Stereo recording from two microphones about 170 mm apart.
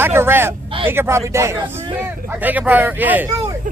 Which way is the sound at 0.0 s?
15° right (ahead or behind).